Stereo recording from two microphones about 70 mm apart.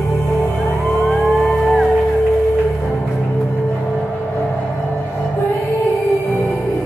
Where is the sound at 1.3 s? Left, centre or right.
Centre.